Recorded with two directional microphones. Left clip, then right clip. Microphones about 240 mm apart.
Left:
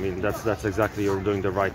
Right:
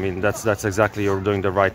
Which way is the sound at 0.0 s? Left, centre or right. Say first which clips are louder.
Right 5 dB; right.